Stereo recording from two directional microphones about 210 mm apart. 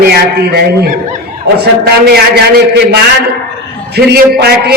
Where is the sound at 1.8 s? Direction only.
50° right (ahead or behind).